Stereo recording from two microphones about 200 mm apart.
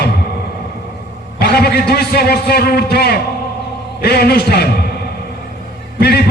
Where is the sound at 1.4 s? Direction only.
55° left (ahead or behind).